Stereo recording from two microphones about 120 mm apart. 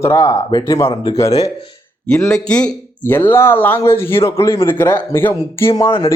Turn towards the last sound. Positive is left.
turn(degrees=20)  # may be behind; listen again after turning